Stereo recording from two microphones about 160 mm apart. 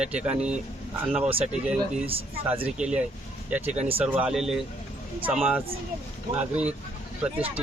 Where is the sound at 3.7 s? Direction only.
40° right (ahead or behind).